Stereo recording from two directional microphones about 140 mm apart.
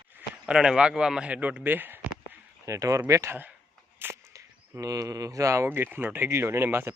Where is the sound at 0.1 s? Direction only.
10° right (ahead or behind).